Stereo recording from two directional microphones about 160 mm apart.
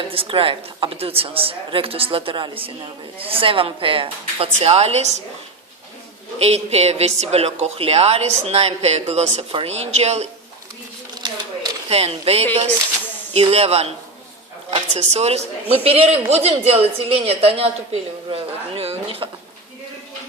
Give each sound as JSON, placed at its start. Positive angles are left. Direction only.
{"t": 0.1, "sound": "a woman's voice", "side_deg": -35}
{"t": 6.4, "sound": "a woman's voice", "side_deg": -40}
{"t": 11.2, "sound": "a sound", "side_deg": -30}
{"t": 11.9, "sound": "a woman's voice", "side_deg": -40}